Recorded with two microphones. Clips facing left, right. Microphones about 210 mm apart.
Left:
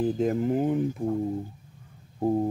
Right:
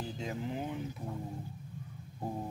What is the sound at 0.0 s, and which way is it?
Speech, 50° left (ahead or behind).